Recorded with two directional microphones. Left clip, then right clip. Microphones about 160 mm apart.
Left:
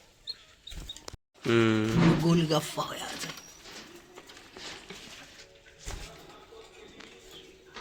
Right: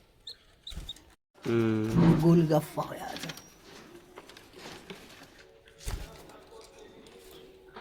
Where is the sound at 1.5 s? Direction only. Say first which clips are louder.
Left 4 dB; 10° left (ahead or behind).